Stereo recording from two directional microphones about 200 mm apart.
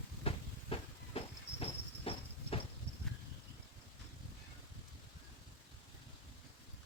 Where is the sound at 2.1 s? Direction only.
30° left (ahead or behind).